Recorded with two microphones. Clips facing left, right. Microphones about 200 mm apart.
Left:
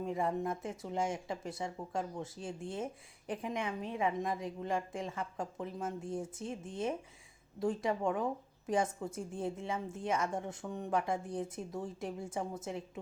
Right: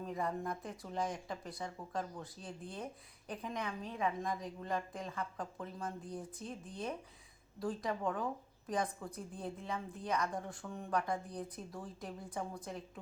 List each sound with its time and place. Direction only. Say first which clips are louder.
0.0 s a woman's voice: left 4 dB; 25° left (ahead or behind)